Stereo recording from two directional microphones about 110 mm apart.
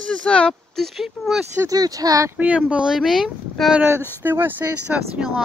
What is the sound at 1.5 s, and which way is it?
Speech, 35° right (ahead or behind).